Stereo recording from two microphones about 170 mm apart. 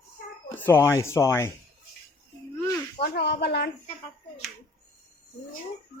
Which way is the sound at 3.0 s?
75° left (ahead or behind).